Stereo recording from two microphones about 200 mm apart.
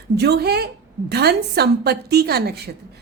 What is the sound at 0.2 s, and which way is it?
A woman's voice, 55° right (ahead or behind).